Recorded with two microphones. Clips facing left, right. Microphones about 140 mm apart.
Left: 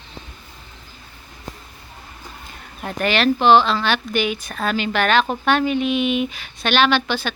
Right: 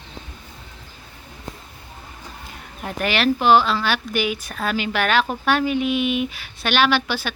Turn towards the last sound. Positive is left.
turn(degrees=-10)  # may be behind; listen again after turning